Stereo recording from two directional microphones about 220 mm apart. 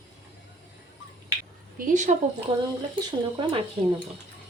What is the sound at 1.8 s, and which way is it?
Speech, 35° right (ahead or behind).